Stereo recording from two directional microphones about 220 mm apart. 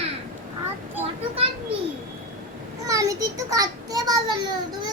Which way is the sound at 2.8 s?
15° right (ahead or behind).